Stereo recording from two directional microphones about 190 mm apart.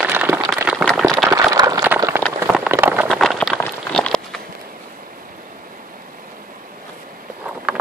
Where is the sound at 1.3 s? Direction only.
20° right (ahead or behind).